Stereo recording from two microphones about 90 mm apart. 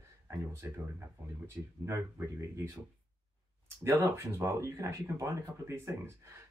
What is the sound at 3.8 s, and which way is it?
Speech, 30° right (ahead or behind).